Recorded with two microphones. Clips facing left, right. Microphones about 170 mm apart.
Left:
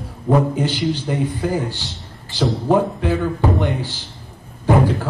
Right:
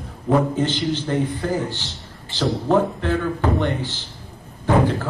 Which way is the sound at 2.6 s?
15° left (ahead or behind).